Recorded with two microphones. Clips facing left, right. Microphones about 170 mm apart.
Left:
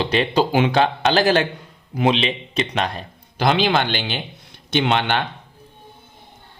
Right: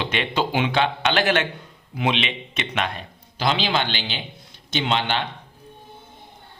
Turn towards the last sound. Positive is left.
turn(degrees=55)  # may be behind; listen again after turning